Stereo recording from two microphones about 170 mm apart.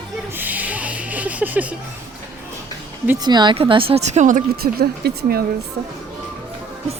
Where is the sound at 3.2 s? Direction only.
25° right (ahead or behind); by 4.4 s 45° right (ahead or behind).